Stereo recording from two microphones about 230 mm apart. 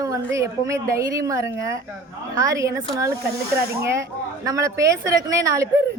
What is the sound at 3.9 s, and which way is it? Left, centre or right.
Speech, centre.